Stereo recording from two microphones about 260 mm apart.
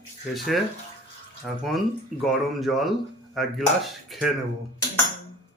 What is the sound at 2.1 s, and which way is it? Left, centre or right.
Speech, right.